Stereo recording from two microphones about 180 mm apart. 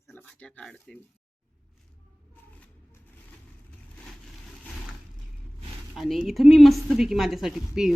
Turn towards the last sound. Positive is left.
turn(degrees=0)  # may be behind; listen again after turning